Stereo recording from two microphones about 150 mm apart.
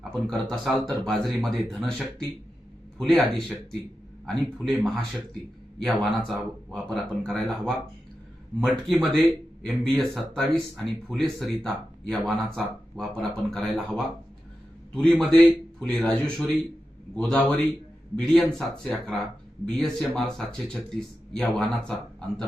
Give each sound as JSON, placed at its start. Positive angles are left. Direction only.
{"t": 0.0, "sound": "speech", "side_deg": 5}
{"t": 8.9, "sound": "a man's voice", "side_deg": 0}